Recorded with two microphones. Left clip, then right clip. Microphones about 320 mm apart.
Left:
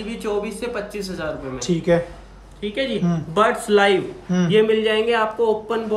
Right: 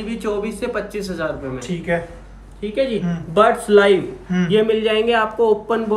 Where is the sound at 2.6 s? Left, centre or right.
Centre.